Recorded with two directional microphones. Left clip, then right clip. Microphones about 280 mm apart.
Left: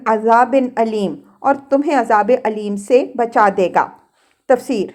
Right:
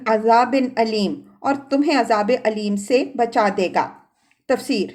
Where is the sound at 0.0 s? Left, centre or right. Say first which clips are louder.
Left 3 dB; centre.